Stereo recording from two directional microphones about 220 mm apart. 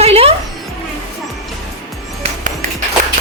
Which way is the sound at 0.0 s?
25° right (ahead or behind).